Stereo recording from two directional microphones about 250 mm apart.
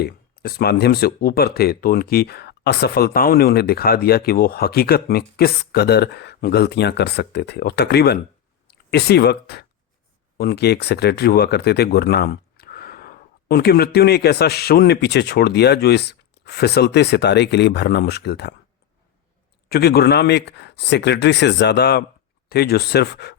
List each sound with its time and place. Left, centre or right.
0.0 s speech: left
19.6 s speech: left